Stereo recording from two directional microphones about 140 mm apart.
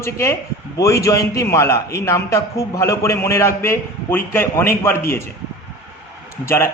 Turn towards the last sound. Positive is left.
turn(degrees=20)  # may be behind; listen again after turning